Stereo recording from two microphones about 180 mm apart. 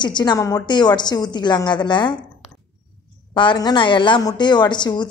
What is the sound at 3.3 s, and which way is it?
A woman's voice, 25° left (ahead or behind).